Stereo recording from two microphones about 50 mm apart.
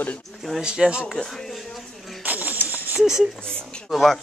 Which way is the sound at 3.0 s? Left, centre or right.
Centre.